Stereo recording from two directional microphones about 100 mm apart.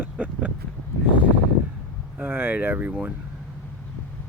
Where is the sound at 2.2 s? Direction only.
20° right (ahead or behind).